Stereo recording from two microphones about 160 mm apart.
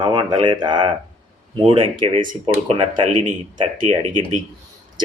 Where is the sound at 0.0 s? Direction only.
30° right (ahead or behind).